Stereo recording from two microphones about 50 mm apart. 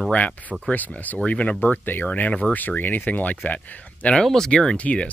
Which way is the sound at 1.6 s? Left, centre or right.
Left.